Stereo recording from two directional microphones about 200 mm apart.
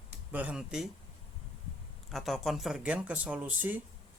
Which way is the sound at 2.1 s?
Centre (ahead or behind).